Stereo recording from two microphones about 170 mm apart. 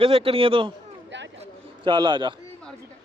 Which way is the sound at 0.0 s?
30° right (ahead or behind).